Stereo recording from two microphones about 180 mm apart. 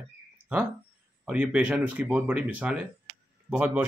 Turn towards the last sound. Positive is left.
turn(degrees=-10)  # may be behind; listen again after turning